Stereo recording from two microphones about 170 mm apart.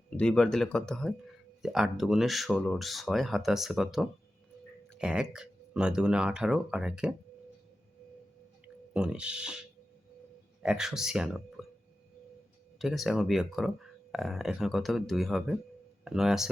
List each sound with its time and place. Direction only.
0.2 s speech: 5° left (ahead or behind)
8.6 s speech: 5° right (ahead or behind)
10.6 s speech: 5° right (ahead or behind)
12.8 s speech: centre (ahead or behind)